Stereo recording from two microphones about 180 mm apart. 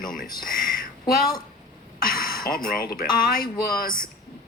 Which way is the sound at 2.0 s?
55° left (ahead or behind).